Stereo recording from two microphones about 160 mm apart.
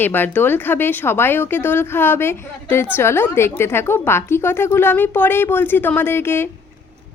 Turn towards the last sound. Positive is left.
turn(degrees=15)  # may be behind; listen again after turning